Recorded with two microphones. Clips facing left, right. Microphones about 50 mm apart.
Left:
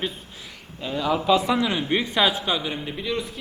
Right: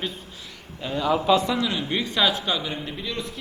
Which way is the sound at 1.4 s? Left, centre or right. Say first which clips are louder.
Left 2 dB; centre.